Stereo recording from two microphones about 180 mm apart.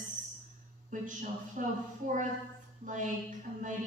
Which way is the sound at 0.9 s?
45° right (ahead or behind).